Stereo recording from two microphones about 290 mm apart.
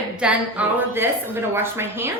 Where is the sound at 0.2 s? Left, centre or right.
Centre.